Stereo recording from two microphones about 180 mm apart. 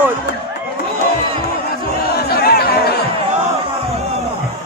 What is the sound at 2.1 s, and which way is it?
Chatter, 60° left (ahead or behind).